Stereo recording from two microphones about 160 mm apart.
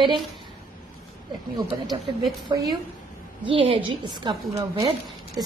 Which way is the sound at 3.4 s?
35° right (ahead or behind).